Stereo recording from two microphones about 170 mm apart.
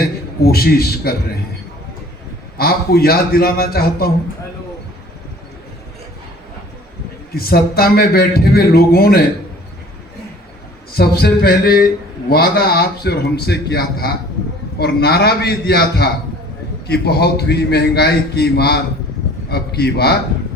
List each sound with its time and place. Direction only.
0.0 s a man's voice: 65° left (ahead or behind)
2.6 s a man's voice: 65° left (ahead or behind)
7.3 s a man's voice: 65° left (ahead or behind)
10.9 s a man's voice: 70° left (ahead or behind)